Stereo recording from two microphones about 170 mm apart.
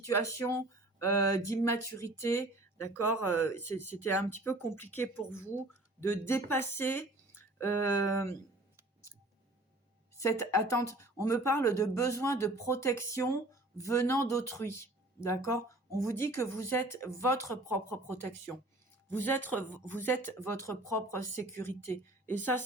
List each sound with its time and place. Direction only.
0.0 s speech: 15° left (ahead or behind)
10.2 s speech: 15° left (ahead or behind)